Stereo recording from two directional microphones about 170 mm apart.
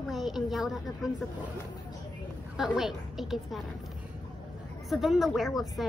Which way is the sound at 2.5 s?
Centre (ahead or behind).